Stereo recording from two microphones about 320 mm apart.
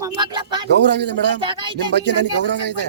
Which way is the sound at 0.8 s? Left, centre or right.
Right.